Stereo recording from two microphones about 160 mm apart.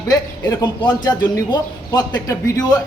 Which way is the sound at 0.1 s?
25° left (ahead or behind).